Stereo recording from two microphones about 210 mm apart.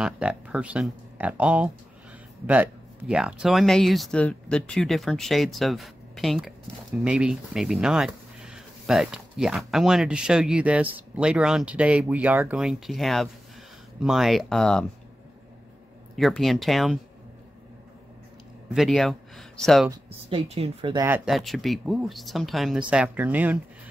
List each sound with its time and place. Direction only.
0.0 s speech: 5° right (ahead or behind)
16.2 s speech: centre (ahead or behind)
18.7 s speech: centre (ahead or behind)
19.9 s speech: 25° right (ahead or behind)
21.3 s speech: centre (ahead or behind)